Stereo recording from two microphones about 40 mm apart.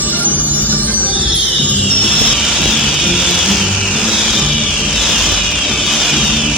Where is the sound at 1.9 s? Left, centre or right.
Left.